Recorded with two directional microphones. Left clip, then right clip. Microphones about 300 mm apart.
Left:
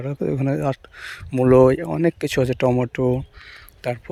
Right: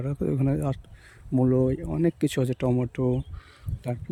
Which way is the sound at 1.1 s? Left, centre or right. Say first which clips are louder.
Left 9 dB; left.